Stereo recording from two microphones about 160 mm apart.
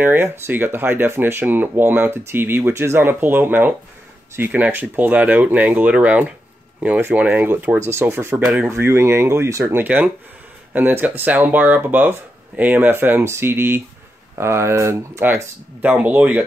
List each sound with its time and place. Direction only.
0.0 s speech: 15° right (ahead or behind)